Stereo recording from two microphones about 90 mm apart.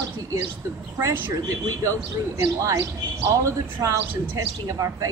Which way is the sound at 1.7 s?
35° right (ahead or behind).